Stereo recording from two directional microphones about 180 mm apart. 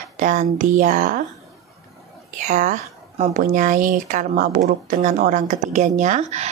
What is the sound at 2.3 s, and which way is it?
A woman's voice, 45° right (ahead or behind).